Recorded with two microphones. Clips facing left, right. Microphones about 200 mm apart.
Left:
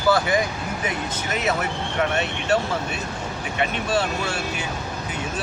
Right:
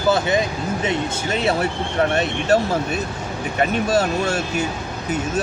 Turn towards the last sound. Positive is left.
turn(degrees=-40)  # may be behind; listen again after turning